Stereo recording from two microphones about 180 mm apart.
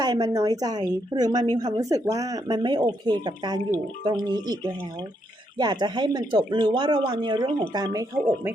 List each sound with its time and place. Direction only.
0.0 s speech: 20° right (ahead or behind)